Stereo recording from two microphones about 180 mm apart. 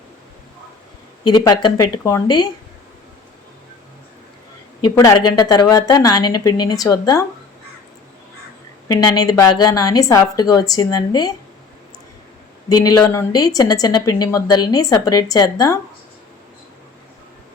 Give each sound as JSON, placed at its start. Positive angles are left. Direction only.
{"t": 1.2, "sound": "a woman's voice", "side_deg": 25}
{"t": 4.8, "sound": "a woman's voice", "side_deg": 20}
{"t": 8.9, "sound": "a woman's voice", "side_deg": 20}
{"t": 12.6, "sound": "a woman's voice", "side_deg": 20}